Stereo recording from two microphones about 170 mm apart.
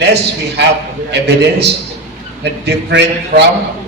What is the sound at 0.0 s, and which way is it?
A man's voice, 80° right.